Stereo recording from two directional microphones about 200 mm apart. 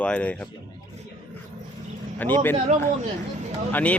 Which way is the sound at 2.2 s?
10° left (ahead or behind).